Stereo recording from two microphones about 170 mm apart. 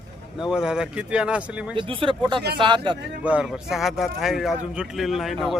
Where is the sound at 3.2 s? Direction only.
5° right (ahead or behind).